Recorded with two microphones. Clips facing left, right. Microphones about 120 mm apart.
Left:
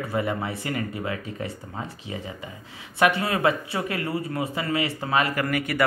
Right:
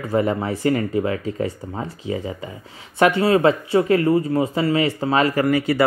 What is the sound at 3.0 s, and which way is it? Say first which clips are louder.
Speech: right 6 dB; 25° right (ahead or behind).